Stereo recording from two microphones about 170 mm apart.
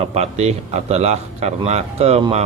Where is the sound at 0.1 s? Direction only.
40° right (ahead or behind).